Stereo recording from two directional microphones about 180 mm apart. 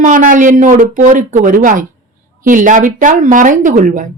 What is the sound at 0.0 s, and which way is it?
A woman's voice, 50° right (ahead or behind).